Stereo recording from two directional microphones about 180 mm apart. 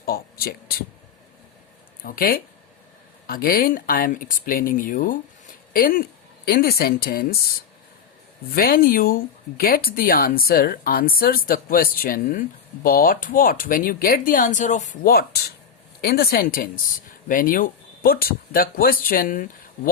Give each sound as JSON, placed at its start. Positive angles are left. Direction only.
{"t": 0.0, "sound": "a sound", "side_deg": 55}
{"t": 2.0, "sound": "speech", "side_deg": 55}
{"t": 8.5, "sound": "speech", "side_deg": 55}